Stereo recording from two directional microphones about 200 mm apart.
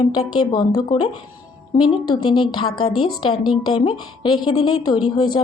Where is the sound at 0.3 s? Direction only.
20° left (ahead or behind).